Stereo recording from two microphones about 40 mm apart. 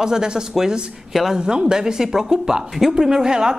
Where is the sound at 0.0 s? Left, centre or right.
Centre.